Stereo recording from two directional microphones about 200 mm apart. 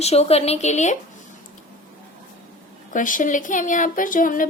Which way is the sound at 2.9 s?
40° left (ahead or behind).